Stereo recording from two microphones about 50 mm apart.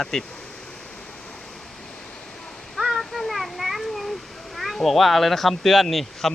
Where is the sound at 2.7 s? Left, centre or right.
Centre.